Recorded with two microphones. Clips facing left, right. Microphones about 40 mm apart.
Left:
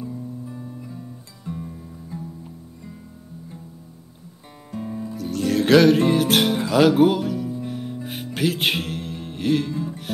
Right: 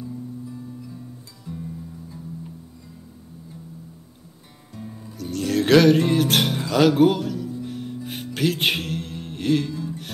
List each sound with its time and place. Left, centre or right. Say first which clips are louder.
0.1 s music: left 1 dB; left
0.9 s guitar: left 2 dB; left
4.7 s music: left 8 dB; left
5.1 s music: left 1 dB; centre
9.7 s music: left 2 dB; centre